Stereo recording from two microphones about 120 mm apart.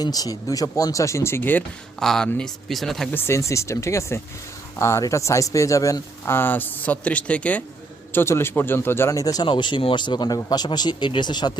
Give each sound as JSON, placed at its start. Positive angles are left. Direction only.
{"t": 0.0, "sound": "speech", "side_deg": 30}
{"t": 2.0, "sound": "speech", "side_deg": 5}
{"t": 3.1, "sound": "speech", "side_deg": 20}
{"t": 9.5, "sound": "speech", "side_deg": 40}